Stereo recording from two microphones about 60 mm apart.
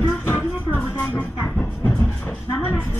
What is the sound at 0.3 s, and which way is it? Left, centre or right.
Music, left.